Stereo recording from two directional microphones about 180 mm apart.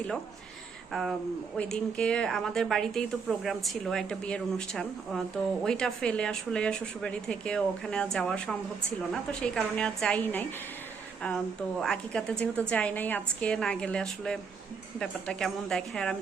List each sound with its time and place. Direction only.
1.5 s speech: 5° left (ahead or behind)
11.8 s speech: 5° left (ahead or behind)